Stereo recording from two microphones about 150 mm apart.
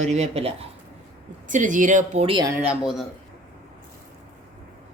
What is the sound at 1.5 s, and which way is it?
Speech, 60° right (ahead or behind).